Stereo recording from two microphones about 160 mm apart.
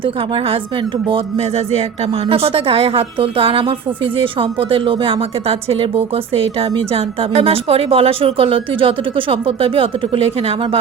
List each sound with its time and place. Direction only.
0.0 s speech: 35° right (ahead or behind)